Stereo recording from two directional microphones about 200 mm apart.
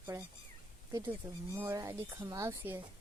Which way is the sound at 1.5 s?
15° right (ahead or behind).